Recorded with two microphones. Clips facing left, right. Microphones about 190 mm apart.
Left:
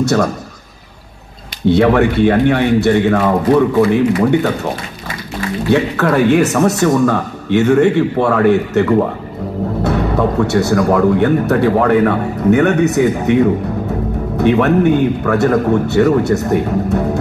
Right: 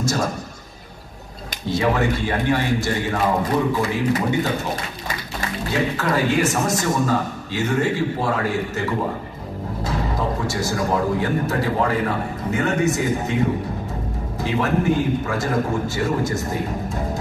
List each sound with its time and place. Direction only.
0.0 s a man's voice: 65° left (ahead or behind)
1.7 s speech: 65° left (ahead or behind)
5.7 s a man's voice: 65° left (ahead or behind)